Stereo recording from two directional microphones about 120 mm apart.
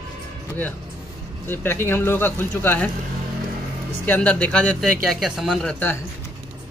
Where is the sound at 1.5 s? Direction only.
20° left (ahead or behind).